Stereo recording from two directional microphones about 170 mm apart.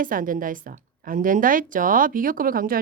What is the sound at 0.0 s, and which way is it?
A woman's voice, 55° right (ahead or behind).